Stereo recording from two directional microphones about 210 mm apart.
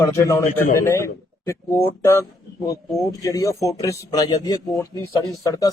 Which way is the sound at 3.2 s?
15° left (ahead or behind).